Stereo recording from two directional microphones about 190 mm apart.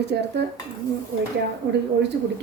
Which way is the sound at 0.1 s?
70° right (ahead or behind).